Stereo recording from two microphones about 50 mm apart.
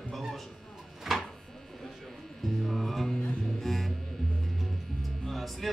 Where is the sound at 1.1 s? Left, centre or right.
Centre.